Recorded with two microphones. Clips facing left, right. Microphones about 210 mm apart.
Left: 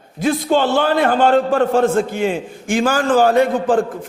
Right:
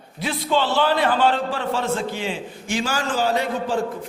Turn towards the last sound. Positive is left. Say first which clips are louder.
# left 8 dB
turn(degrees=50)  # may be behind; listen again after turning